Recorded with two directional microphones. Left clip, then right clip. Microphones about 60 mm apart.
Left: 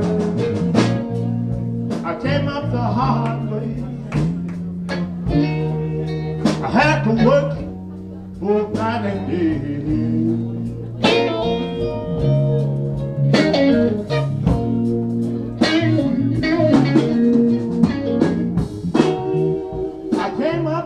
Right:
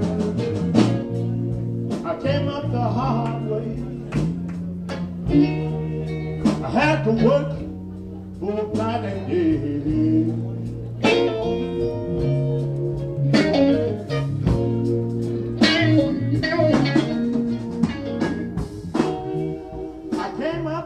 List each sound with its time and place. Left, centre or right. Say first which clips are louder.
0.6 s music: left 2 dB; left
5.3 s music: right 1 dB; left
11.0 s music: left 2 dB; left